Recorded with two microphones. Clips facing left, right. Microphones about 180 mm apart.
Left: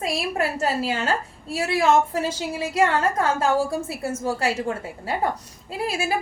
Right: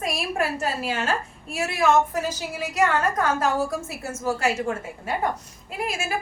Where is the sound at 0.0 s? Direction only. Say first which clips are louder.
Left 1 dB; 25° left (ahead or behind).